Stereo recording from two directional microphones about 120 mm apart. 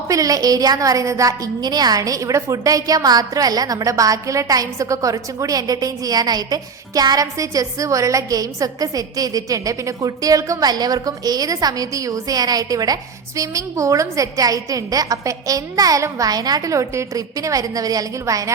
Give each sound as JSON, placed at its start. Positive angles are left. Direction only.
{"t": 0.1, "sound": "a woman's voice", "side_deg": -30}